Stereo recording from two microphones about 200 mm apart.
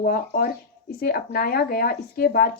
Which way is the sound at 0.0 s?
45° left (ahead or behind).